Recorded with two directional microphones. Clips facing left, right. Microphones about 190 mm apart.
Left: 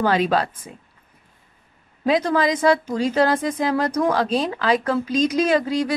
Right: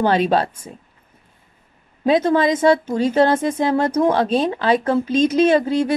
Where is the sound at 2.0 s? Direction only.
25° right (ahead or behind).